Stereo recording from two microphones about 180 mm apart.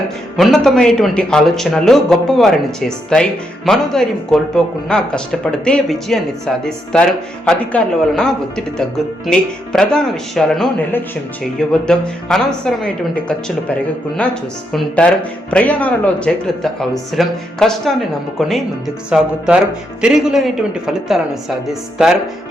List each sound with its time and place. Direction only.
0.3 s speech: centre (ahead or behind)